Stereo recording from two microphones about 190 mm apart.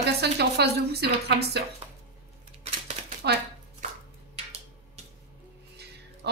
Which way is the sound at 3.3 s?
60° right (ahead or behind).